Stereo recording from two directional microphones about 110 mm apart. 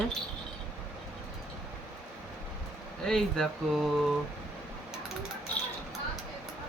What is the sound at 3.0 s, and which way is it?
Speech, 5° left (ahead or behind).